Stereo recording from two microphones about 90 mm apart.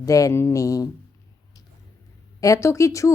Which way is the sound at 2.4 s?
35° left (ahead or behind).